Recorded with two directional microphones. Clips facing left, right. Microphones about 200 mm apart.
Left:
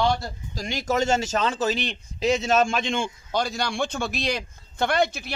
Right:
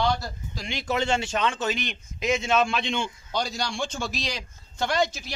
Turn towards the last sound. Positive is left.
turn(degrees=60)  # may be behind; listen again after turning